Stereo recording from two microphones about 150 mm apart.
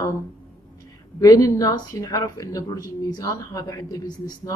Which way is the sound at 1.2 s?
25° left (ahead or behind).